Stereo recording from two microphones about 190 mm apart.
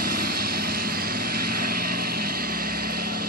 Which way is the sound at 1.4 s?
50° right (ahead or behind).